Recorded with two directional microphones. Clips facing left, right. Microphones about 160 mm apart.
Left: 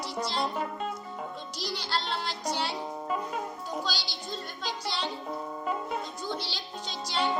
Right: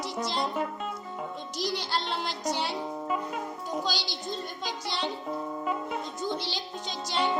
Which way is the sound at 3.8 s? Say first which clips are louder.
Right 3 dB; 20° right (ahead or behind).